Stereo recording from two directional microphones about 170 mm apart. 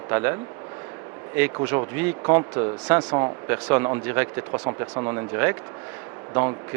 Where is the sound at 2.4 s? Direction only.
20° right (ahead or behind).